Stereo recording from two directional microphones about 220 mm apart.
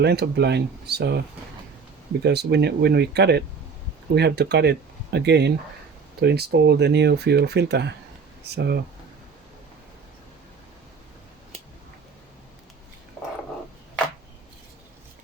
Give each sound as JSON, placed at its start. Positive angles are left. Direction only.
{"t": 0.0, "sound": "speech", "side_deg": -50}
{"t": 2.2, "sound": "speech", "side_deg": -50}